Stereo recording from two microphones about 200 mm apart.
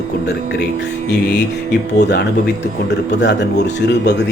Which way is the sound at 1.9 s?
60° left (ahead or behind).